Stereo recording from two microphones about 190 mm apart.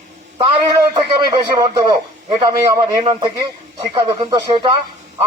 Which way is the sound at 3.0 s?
25° right (ahead or behind).